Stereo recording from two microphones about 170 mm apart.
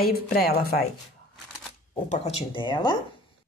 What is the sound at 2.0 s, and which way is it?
Speech, 40° left (ahead or behind).